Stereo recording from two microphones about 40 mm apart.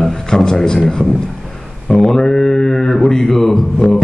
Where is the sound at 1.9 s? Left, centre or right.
Centre.